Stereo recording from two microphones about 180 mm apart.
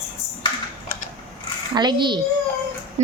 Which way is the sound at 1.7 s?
25° right (ahead or behind).